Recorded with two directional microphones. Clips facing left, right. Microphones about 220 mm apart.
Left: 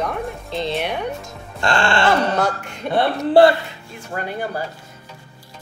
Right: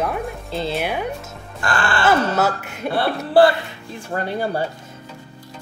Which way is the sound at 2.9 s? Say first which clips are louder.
Left 3 dB; 20° left (ahead or behind).